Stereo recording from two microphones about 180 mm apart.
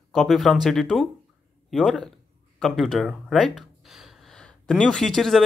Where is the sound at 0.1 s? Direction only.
Centre (ahead or behind).